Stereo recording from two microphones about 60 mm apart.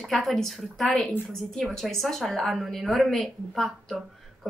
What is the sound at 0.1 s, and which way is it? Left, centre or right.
A woman's voice, centre.